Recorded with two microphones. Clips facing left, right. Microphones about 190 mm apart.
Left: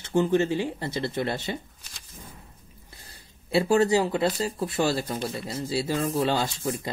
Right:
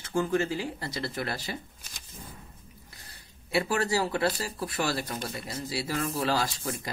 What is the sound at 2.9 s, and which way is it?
Speech, 30° left (ahead or behind).